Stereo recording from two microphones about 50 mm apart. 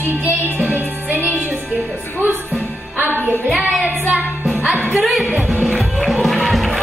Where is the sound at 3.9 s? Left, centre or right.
Right.